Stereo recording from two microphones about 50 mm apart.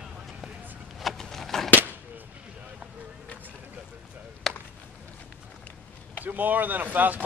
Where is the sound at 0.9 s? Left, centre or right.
Centre.